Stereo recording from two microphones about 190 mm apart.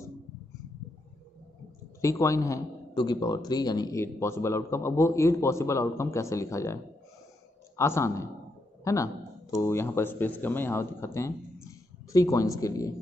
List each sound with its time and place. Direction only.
2.0 s a man's voice: 15° left (ahead or behind)